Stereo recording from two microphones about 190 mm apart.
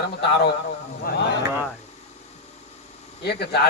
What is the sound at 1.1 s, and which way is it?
Speech, 50° left (ahead or behind).